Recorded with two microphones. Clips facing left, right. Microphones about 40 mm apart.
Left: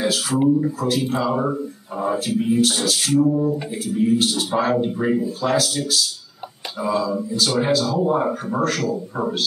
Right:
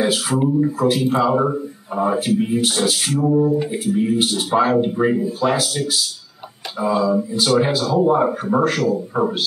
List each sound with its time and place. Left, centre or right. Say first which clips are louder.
0.0 s speech: right 1 dB; centre